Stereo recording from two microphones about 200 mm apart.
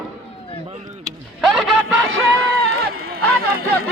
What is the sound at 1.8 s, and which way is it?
Music, 90° right.